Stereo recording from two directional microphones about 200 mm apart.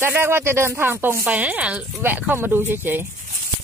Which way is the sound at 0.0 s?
10° right (ahead or behind).